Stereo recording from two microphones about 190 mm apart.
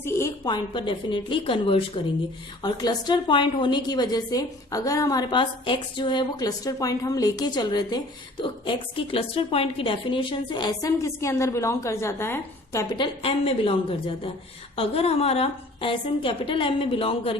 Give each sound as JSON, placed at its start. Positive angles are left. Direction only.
{"t": 0.0, "sound": "a woman's voice", "side_deg": 20}
{"t": 14.8, "sound": "a woman's voice", "side_deg": 30}